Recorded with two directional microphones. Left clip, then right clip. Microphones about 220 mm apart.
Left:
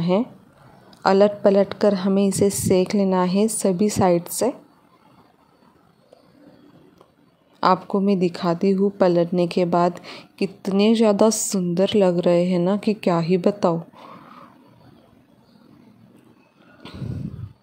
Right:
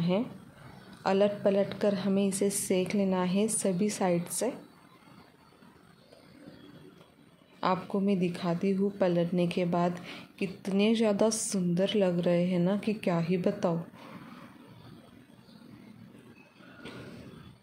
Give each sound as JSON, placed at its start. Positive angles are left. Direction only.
{"t": 1.0, "sound": "a woman's voice", "side_deg": 40}
{"t": 7.6, "sound": "a woman's voice", "side_deg": 35}
{"t": 16.8, "sound": "a sound", "side_deg": 30}